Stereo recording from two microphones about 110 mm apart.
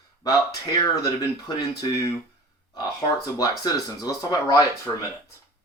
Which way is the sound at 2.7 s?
35° left (ahead or behind).